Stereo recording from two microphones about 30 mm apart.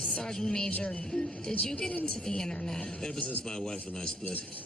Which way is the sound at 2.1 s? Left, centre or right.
Left.